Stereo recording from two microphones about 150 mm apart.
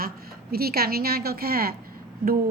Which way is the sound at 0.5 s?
90° right.